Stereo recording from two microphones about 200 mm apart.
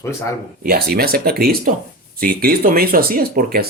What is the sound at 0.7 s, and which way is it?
Speech, 50° right (ahead or behind).